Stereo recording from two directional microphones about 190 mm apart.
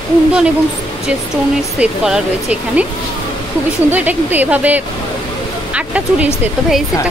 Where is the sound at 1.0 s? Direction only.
5° right (ahead or behind).